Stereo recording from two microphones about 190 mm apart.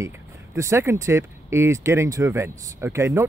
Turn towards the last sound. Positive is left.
turn(degrees=-15)  # may be behind; listen again after turning